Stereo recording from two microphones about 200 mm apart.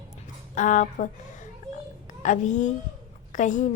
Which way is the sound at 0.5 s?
40° left (ahead or behind).